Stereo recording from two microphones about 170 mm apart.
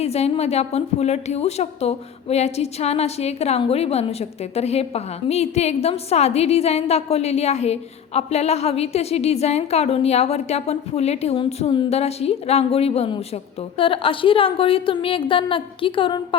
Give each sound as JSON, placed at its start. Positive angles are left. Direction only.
{"t": 0.0, "sound": "a woman's voice", "side_deg": 40}